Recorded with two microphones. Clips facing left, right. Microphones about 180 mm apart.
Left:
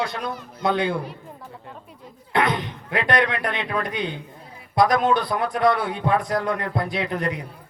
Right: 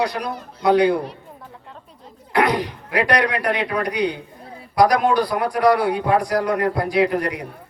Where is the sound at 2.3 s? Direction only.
25° left (ahead or behind).